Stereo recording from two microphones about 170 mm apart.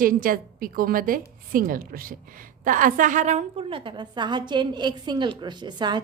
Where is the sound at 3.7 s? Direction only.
30° right (ahead or behind).